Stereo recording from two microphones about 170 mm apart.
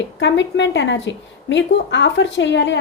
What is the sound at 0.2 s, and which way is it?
A woman's voice, 90° left.